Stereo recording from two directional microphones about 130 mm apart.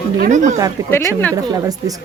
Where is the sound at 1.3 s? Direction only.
30° right (ahead or behind).